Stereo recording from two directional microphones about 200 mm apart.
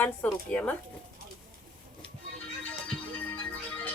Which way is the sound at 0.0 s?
10° left (ahead or behind).